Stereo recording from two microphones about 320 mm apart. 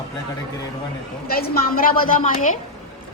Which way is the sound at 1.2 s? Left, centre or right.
Left.